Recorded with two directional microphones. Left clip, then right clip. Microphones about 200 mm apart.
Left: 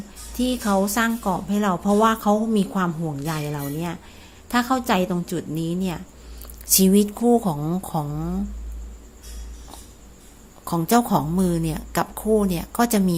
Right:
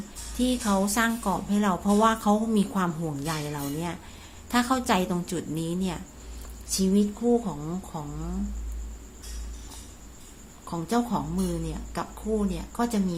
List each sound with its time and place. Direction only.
0.3 s a woman's voice: 25° left (ahead or behind)
6.7 s a woman's voice: 35° left (ahead or behind)
10.7 s a woman's voice: 35° left (ahead or behind)